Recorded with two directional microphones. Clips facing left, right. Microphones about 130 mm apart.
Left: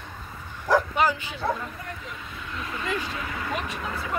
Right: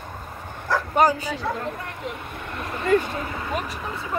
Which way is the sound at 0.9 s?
40° right (ahead or behind).